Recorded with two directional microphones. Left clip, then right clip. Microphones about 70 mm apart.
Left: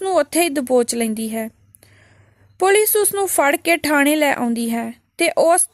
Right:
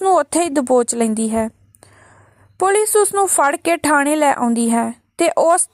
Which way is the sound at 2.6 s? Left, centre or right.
Right.